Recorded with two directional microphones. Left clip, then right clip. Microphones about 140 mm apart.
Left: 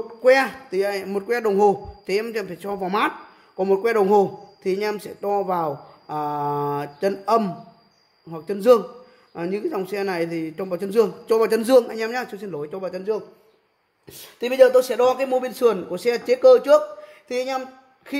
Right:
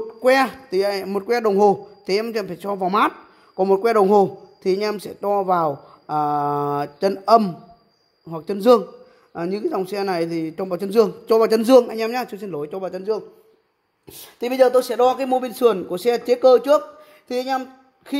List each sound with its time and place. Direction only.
0.2 s a man's voice: 55° right (ahead or behind)